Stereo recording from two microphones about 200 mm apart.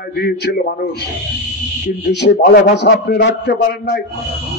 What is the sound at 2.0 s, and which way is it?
A man's voice, 55° left (ahead or behind).